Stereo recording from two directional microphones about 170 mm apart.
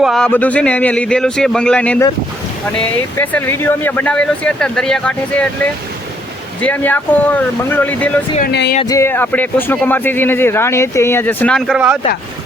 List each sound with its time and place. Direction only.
0.0 s speech: centre (ahead or behind)
6.6 s speech: 10° left (ahead or behind)
8.4 s speech: 75° left (ahead or behind)
8.8 s speech: 20° left (ahead or behind); by 11.9 s 5° right (ahead or behind)